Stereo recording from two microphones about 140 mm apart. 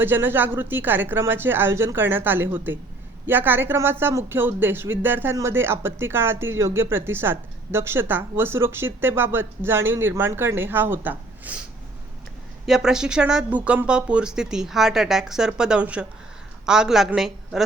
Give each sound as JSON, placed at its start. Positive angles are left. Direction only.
{"t": 0.0, "sound": "speech", "side_deg": -15}
{"t": 12.6, "sound": "speech", "side_deg": -5}